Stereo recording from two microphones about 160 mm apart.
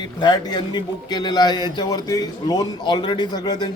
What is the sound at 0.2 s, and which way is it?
Speech, 25° left (ahead or behind).